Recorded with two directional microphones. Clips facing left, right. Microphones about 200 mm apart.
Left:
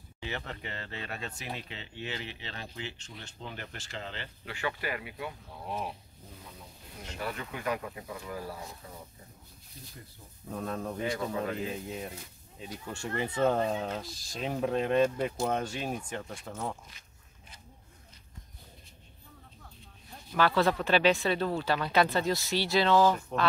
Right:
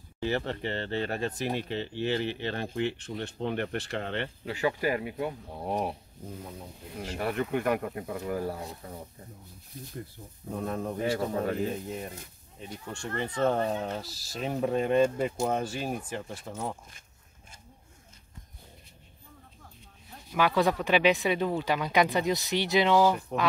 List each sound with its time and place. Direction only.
0.2 s speech: 35° right (ahead or behind)
2.1 s speech: 55° right (ahead or behind)
4.5 s speech: 35° right (ahead or behind)
7.2 s speech: 60° right (ahead or behind)
10.5 s speech: 10° right (ahead or behind)
11.0 s speech: 40° right (ahead or behind)
12.5 s speech: centre (ahead or behind)
20.2 s speech: 15° right (ahead or behind)